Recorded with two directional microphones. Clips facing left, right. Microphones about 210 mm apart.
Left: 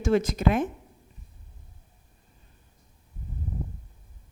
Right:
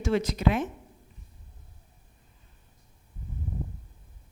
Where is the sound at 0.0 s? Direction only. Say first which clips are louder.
Left 2 dB; 45° left (ahead or behind).